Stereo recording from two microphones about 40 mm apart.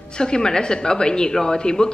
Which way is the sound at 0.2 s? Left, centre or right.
Centre.